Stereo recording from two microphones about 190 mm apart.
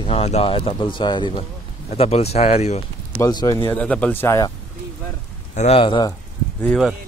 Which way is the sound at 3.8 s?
5° left (ahead or behind).